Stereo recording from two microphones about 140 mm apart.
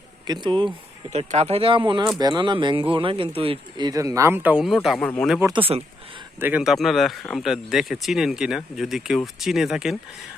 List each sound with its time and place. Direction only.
0.3 s speech: 35° right (ahead or behind)
1.1 s speech: 50° right (ahead or behind); by 4.9 s 5° right (ahead or behind)
4.9 s speech: 10° left (ahead or behind)
5.5 s speech: 40° right (ahead or behind)
6.4 s speech: 5° right (ahead or behind)